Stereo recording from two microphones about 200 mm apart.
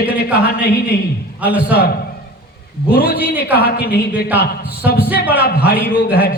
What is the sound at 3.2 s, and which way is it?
Speech, 10° right (ahead or behind).